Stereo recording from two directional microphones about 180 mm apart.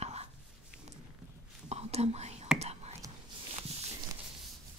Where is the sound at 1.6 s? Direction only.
35° right (ahead or behind).